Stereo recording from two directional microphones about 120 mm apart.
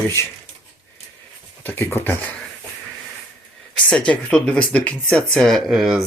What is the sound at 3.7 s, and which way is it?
Speech, 10° left (ahead or behind).